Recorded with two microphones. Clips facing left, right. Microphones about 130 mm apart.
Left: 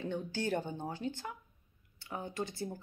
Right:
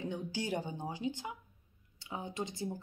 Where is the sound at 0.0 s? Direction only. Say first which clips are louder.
Left 2 dB; 15° right (ahead or behind).